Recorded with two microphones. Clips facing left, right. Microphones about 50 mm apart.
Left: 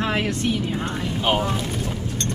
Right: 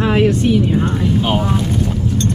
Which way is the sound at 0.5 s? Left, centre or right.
Centre.